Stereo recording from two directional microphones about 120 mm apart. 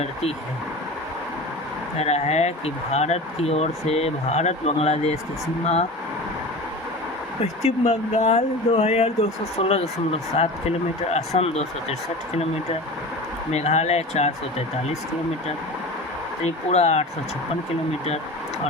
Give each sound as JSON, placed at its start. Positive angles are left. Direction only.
{"t": 0.0, "sound": "speech", "side_deg": 60}
{"t": 2.0, "sound": "speech", "side_deg": 65}
{"t": 7.4, "sound": "speech", "side_deg": 65}
{"t": 13.5, "sound": "speech", "side_deg": 65}
{"t": 16.4, "sound": "speech", "side_deg": 65}